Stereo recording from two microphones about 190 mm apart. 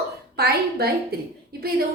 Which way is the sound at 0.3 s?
55° right (ahead or behind).